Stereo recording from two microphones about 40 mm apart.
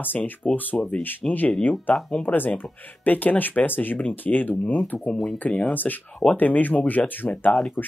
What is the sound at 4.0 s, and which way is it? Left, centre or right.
Speech, left.